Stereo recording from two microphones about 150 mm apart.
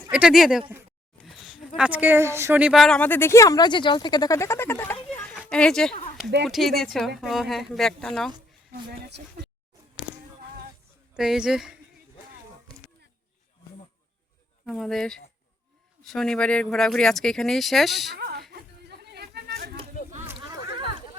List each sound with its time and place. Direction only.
0.1 s speech: 5° right (ahead or behind)
2.7 s speech: 5° left (ahead or behind)
11.1 s speech: 5° right (ahead or behind)
14.6 s speech: centre (ahead or behind)
18.1 s a sound: 90° right
18.5 s chatter: 90° right